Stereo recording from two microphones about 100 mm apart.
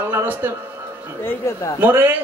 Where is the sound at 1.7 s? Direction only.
20° right (ahead or behind).